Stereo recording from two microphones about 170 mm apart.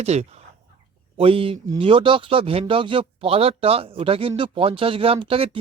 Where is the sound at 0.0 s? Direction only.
40° right (ahead or behind).